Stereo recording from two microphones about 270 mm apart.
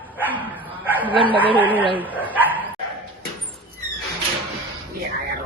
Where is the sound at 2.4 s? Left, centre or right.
Centre.